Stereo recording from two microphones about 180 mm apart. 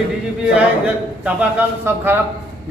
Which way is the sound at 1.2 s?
10° right (ahead or behind).